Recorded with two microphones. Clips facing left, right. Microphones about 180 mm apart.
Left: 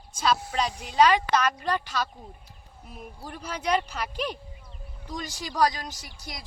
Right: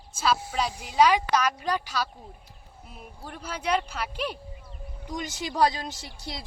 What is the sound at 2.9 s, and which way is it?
Speech, centre (ahead or behind).